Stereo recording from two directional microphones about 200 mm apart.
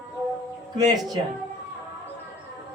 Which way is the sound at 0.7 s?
20° right (ahead or behind).